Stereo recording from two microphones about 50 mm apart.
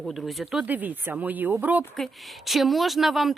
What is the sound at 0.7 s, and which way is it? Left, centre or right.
Speech, right.